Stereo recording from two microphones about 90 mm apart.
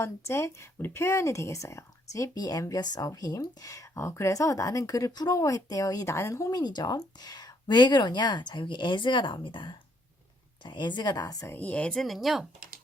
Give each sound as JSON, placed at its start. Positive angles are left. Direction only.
{"t": 0.0, "sound": "speech", "side_deg": 30}
{"t": 11.4, "sound": "speech", "side_deg": 20}
{"t": 11.9, "sound": "speech", "side_deg": 0}